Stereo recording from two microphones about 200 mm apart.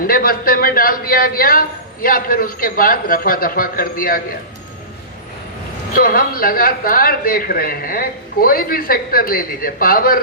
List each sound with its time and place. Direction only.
0.0 s a man's voice: 45° left (ahead or behind)
6.0 s a man's voice: 45° left (ahead or behind)